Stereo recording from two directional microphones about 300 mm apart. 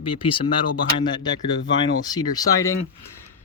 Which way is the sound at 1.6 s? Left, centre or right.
Left.